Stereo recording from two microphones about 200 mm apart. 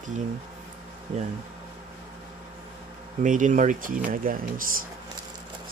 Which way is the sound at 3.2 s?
40° right (ahead or behind).